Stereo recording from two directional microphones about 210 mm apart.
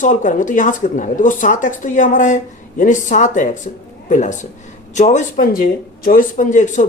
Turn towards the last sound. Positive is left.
turn(degrees=35)  # may be behind; listen again after turning